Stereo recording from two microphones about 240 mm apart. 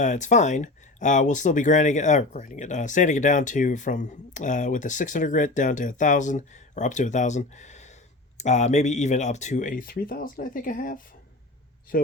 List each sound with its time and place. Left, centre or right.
0.0 s speech: left